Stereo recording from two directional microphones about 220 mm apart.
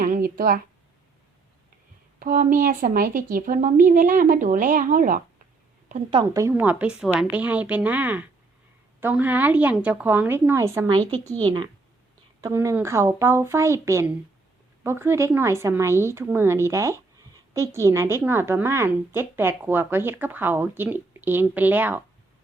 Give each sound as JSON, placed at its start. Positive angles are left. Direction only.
{"t": 0.0, "sound": "a sound", "side_deg": -40}
{"t": 2.1, "sound": "a woman's voice", "side_deg": -40}
{"t": 5.9, "sound": "a woman's voice", "side_deg": -25}
{"t": 6.2, "sound": "a woman's voice", "side_deg": -10}